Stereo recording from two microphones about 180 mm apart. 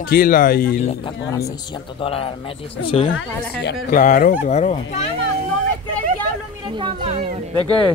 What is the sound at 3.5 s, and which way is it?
Speech, 65° left (ahead or behind).